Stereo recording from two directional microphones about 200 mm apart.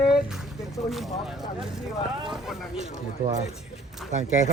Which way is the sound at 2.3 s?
Centre (ahead or behind).